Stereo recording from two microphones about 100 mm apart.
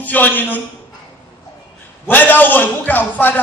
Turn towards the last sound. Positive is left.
turn(degrees=15)  # may be behind; listen again after turning